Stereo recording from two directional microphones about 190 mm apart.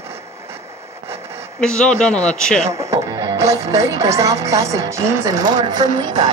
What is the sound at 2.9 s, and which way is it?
Speech, 15° right (ahead or behind).